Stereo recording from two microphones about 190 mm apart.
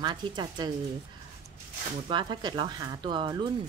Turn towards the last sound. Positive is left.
turn(degrees=-25)  # may be behind; listen again after turning